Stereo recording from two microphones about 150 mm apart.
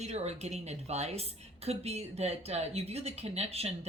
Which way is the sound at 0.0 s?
45° right (ahead or behind).